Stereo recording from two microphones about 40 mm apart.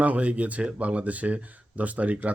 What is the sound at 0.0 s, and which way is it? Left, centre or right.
Speech, right.